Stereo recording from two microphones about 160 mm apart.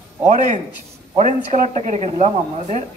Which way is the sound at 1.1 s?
45° right (ahead or behind).